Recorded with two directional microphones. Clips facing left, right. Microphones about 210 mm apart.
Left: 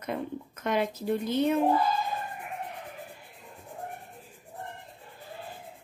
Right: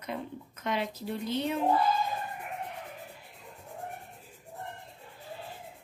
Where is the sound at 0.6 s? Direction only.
50° left (ahead or behind).